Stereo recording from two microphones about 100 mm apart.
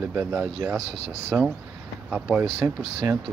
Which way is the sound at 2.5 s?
30° right (ahead or behind).